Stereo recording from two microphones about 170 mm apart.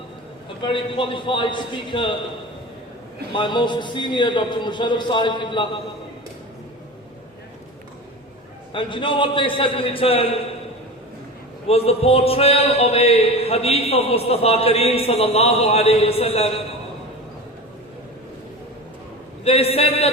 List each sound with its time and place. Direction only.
0.6 s a man's voice: 30° left (ahead or behind)
3.3 s a man's voice: 30° left (ahead or behind)
8.7 s a man's voice: 30° left (ahead or behind)
11.7 s speech: 35° left (ahead or behind)
19.5 s speech: 35° left (ahead or behind)